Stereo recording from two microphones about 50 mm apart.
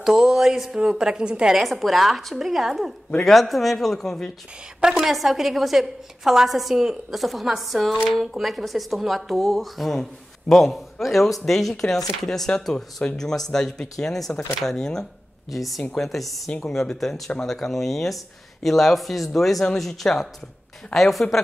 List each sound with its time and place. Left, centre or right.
0.0 s a sound: centre
1.5 s a woman's voice: centre
4.8 s a woman's voice: centre; by 13.2 s left
13.2 s speech: centre
15.5 s a woman's voice: centre